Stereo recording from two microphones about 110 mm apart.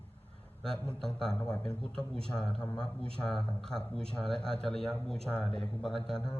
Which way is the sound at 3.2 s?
5° left (ahead or behind).